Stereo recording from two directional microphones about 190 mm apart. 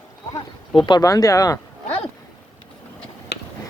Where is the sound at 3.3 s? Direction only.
60° left (ahead or behind).